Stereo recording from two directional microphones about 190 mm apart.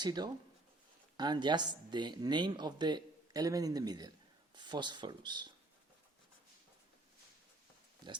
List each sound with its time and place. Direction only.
0.0 s speech: 20° right (ahead or behind)